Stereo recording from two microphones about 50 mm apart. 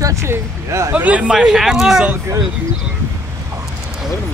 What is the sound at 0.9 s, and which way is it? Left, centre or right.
Speech, right.